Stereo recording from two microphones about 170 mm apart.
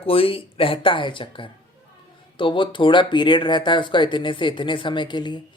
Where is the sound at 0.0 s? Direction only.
35° left (ahead or behind).